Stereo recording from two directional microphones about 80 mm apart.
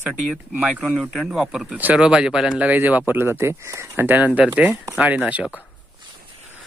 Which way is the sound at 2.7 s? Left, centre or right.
Right.